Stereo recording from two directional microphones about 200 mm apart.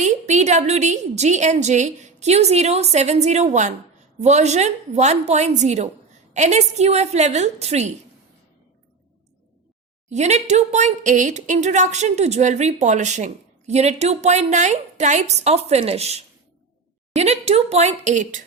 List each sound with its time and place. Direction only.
0.0 s a woman's voice: 35° right (ahead or behind)
10.1 s a woman's voice: 35° right (ahead or behind)